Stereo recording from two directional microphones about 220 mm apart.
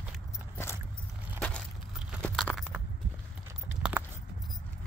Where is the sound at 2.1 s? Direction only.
5° left (ahead or behind).